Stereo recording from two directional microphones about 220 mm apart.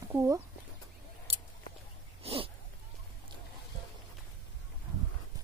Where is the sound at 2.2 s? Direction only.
25° right (ahead or behind).